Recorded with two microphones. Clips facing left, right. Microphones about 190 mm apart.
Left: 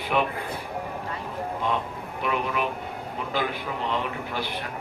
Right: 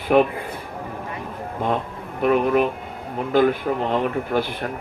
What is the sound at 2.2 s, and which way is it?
Speech, 45° right (ahead or behind).